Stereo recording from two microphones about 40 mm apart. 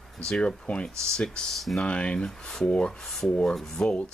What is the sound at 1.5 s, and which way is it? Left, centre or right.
Speech, centre.